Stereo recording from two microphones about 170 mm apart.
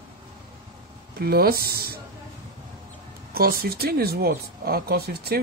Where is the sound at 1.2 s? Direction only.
65° right (ahead or behind).